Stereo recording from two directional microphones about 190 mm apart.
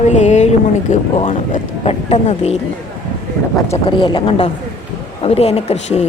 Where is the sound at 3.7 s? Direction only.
25° left (ahead or behind).